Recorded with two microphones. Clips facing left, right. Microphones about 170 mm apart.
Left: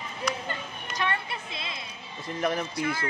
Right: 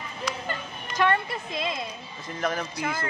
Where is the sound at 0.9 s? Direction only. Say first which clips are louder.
Right 7 dB; 45° right (ahead or behind).